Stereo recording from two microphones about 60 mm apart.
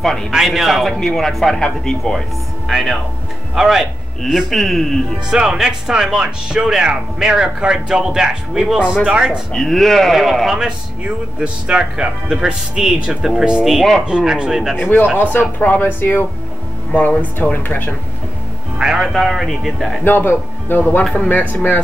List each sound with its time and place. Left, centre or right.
0.0 s speech: centre
0.3 s speech: centre
2.7 s speech: centre
5.3 s speech: centre
9.5 s speech: centre
14.0 s speech: centre
14.8 s speech: left
16.9 s speech: left
18.9 s speech: centre
20.1 s speech: left